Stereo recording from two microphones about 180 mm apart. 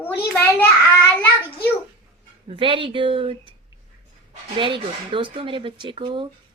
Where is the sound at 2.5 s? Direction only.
30° right (ahead or behind).